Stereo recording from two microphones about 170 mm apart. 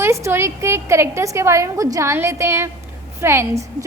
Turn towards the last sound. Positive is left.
turn(degrees=-15)  # may be behind; listen again after turning